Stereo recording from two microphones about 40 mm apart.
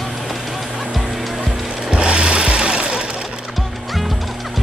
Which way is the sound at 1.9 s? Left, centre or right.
Right.